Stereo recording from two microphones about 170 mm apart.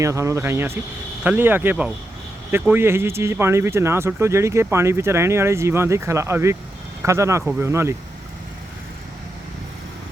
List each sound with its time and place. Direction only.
0.0 s speech: 20° right (ahead or behind)